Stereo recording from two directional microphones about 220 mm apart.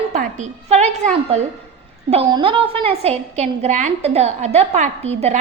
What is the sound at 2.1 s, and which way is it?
A woman's voice, 25° right (ahead or behind).